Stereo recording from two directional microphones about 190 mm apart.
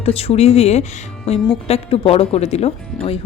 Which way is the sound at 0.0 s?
30° left (ahead or behind).